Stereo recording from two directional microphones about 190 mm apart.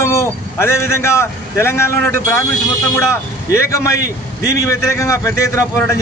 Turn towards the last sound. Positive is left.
turn(degrees=15)  # may be behind; listen again after turning